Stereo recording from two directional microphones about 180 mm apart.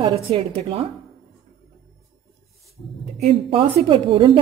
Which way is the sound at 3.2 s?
30° right (ahead or behind).